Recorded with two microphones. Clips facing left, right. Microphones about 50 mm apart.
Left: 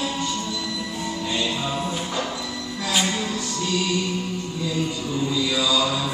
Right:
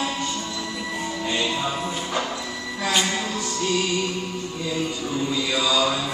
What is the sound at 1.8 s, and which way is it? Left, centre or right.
Music, centre.